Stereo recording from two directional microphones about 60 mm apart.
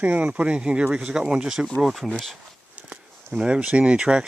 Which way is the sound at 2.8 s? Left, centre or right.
Right.